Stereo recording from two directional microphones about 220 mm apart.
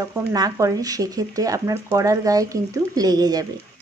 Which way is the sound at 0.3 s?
15° right (ahead or behind).